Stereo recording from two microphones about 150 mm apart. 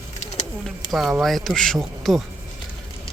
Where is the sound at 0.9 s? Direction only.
Centre (ahead or behind).